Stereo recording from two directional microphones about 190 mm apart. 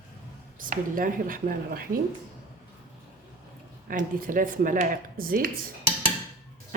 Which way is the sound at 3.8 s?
45° right (ahead or behind).